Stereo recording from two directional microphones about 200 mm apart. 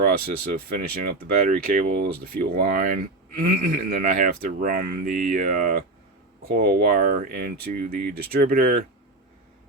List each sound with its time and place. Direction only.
0.7 s speech: 45° right (ahead or behind)